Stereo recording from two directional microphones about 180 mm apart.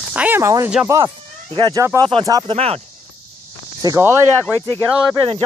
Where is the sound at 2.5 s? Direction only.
35° right (ahead or behind).